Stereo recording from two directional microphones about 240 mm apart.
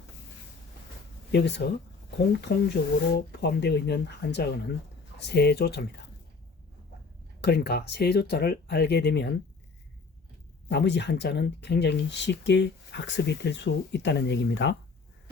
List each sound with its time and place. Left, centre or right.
1.3 s speech: left
7.4 s speech: left
10.7 s speech: left